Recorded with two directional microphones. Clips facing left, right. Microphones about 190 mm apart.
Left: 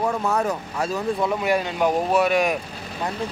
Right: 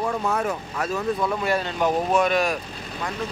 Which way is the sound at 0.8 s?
20° left (ahead or behind).